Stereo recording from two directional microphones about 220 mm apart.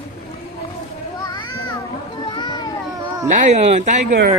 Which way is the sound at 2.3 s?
20° left (ahead or behind).